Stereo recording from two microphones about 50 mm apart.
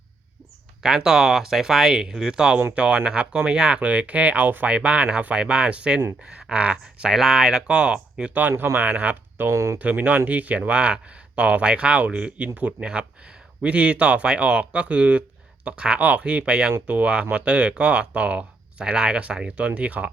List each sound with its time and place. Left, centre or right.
0.8 s speech: centre; by 4.7 s right
4.7 s speech: right
7.1 s speech: centre
7.7 s speech: right
7.9 s speech: centre
8.3 s speech: right
8.5 s speech: right
8.8 s speech: right
9.5 s speech: right
9.7 s speech: right